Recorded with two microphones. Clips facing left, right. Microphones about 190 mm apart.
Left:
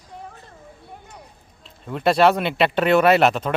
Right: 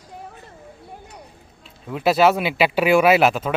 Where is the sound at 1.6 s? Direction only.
5° right (ahead or behind).